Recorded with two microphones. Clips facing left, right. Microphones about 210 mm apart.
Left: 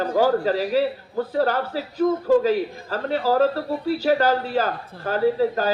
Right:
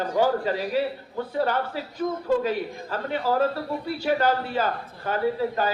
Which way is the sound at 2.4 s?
40° left (ahead or behind).